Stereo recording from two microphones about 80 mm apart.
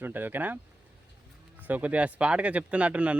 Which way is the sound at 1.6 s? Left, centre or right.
Centre.